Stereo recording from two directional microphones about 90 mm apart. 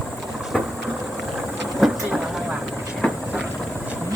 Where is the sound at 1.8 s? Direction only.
Centre (ahead or behind).